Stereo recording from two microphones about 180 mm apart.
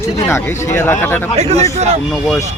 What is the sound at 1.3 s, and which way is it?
Speech, 35° right (ahead or behind).